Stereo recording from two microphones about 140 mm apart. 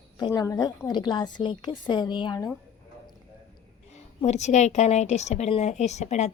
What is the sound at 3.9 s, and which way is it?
A woman's voice, 55° left (ahead or behind).